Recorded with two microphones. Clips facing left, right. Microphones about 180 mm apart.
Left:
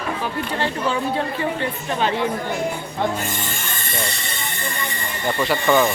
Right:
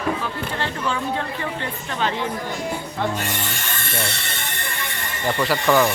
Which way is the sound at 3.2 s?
70° right (ahead or behind).